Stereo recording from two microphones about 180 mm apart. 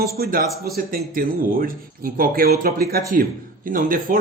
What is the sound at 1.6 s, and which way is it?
A man's voice, 55° right (ahead or behind).